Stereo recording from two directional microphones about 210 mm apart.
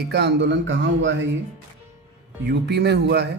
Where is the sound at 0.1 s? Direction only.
55° right (ahead or behind).